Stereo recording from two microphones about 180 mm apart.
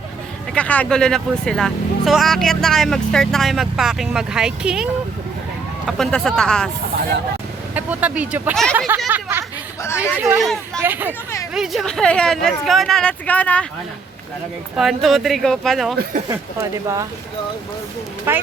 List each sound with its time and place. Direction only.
0.5 s speech: 10° left (ahead or behind)
7.7 s speech: 10° right (ahead or behind)
10.4 s speech: centre (ahead or behind)
10.8 s speech: 10° right (ahead or behind); by 13.7 s 10° left (ahead or behind)
14.8 s speech: centre (ahead or behind)
16.3 s speech: 15° right (ahead or behind)
18.3 s speech: 10° right (ahead or behind)